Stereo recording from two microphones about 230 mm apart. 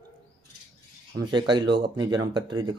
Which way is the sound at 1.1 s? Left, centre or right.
Centre.